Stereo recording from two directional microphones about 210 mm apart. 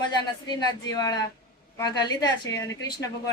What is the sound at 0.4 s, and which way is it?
A woman's voice, 20° left (ahead or behind).